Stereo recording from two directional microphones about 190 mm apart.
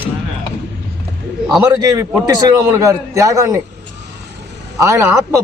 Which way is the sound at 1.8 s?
15° right (ahead or behind).